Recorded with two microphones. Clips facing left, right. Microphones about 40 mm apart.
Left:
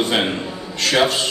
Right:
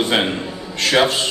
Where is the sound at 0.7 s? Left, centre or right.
Right.